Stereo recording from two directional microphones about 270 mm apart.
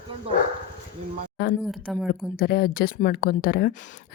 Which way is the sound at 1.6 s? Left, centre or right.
Centre.